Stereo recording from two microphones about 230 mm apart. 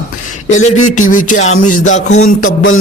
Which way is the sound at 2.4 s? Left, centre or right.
Left.